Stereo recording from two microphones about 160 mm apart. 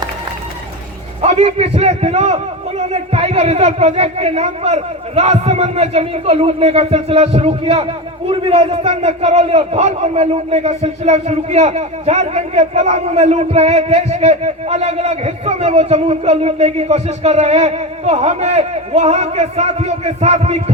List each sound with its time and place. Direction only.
1.2 s a man's voice: 45° right (ahead or behind)